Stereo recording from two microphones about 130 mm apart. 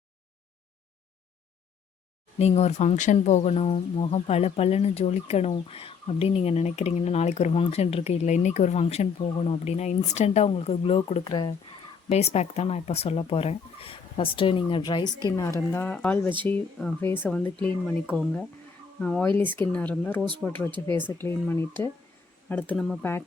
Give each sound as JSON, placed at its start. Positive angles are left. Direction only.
{"t": 2.4, "sound": "speech", "side_deg": 55}
{"t": 12.0, "sound": "speech", "side_deg": 55}
{"t": 15.4, "sound": "speech", "side_deg": 25}
{"t": 18.0, "sound": "speech", "side_deg": -5}